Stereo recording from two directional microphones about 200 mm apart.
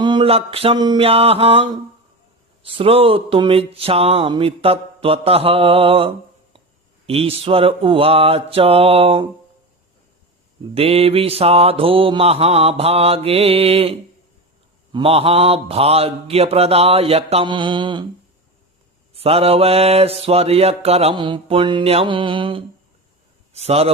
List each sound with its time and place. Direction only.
0.0 s mantra: 25° right (ahead or behind)
2.6 s mantra: 25° right (ahead or behind)
7.1 s mantra: 30° right (ahead or behind)
10.8 s mantra: 30° right (ahead or behind)
19.1 s mantra: 30° right (ahead or behind)
23.5 s a man's voice: 30° right (ahead or behind)